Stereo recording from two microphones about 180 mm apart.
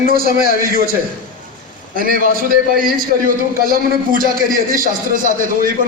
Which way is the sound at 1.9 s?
50° right (ahead or behind).